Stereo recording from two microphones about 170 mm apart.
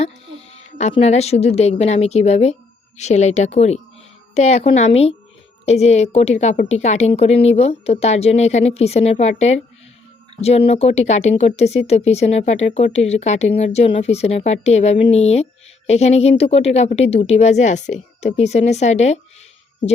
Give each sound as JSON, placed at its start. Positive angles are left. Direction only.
{"t": 0.0, "sound": "speech", "side_deg": 40}